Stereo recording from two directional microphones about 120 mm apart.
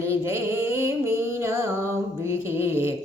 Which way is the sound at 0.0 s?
25° right (ahead or behind).